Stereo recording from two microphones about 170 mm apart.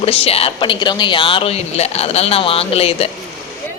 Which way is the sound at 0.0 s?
35° left (ahead or behind).